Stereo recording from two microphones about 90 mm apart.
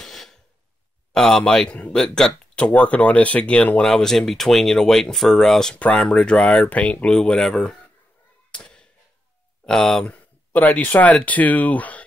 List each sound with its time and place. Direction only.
0.0 s cough: 5° left (ahead or behind)
1.1 s speech: 5° left (ahead or behind)
8.5 s a sound: 10° left (ahead or behind)
9.7 s speech: 5° left (ahead or behind)